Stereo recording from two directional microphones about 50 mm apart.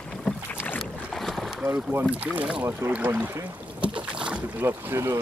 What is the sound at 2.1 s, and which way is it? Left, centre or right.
Speech, right.